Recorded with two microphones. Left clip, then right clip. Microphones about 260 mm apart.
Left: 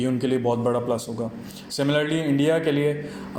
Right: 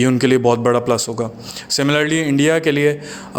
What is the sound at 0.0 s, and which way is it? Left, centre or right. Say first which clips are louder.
A man's voice: right 9 dB; right.